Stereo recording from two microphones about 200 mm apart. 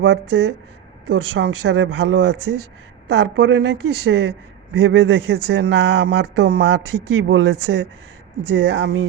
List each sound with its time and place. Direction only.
0.0 s speech: 65° right (ahead or behind)